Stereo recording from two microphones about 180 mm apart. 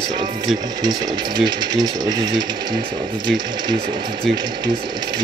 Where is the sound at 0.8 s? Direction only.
25° right (ahead or behind).